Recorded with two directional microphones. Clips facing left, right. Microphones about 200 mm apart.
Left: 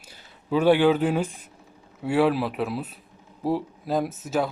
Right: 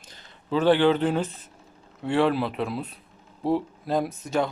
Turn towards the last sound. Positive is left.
turn(degrees=5)  # may be behind; listen again after turning